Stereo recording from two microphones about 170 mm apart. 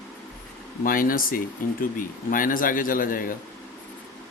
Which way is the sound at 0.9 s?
55° left (ahead or behind).